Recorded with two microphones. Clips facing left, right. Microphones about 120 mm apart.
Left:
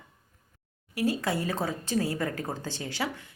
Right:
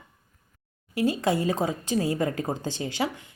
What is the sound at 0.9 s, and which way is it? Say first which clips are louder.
Speech: right 4 dB; 25° right (ahead or behind).